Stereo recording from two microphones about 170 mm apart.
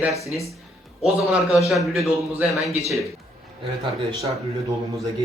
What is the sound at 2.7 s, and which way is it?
Speech, 20° left (ahead or behind).